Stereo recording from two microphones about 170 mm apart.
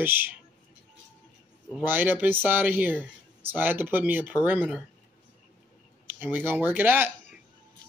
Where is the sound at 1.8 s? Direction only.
10° right (ahead or behind).